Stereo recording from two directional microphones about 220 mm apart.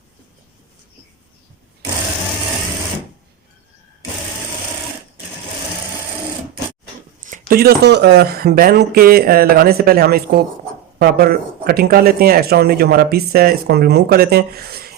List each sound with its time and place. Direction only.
7.2 s speech: 35° right (ahead or behind)